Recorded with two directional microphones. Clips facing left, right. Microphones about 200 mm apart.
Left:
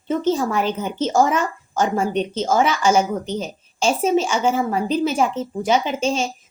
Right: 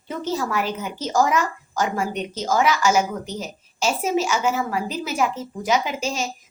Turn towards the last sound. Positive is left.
turn(degrees=30)  # may be behind; listen again after turning